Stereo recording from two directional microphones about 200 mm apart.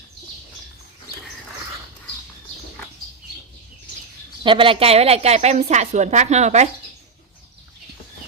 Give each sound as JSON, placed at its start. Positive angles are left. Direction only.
{"t": 4.4, "sound": "a woman's voice", "side_deg": -25}